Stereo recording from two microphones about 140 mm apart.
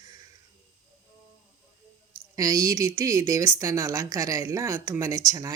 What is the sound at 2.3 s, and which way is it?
Speech, 25° right (ahead or behind).